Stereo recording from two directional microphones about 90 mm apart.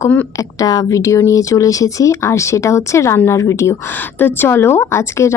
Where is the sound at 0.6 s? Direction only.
40° left (ahead or behind).